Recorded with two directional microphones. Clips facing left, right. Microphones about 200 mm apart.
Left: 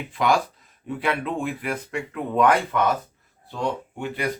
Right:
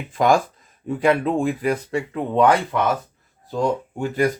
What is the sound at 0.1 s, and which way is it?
Speech, 45° right (ahead or behind).